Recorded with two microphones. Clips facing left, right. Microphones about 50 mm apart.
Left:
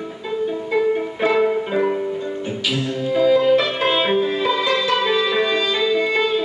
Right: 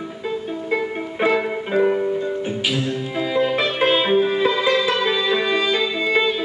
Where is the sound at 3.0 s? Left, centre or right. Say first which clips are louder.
Left 8 dB; centre.